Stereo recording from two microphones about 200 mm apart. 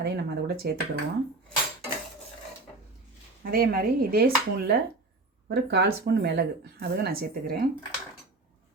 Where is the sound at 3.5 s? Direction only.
50° right (ahead or behind).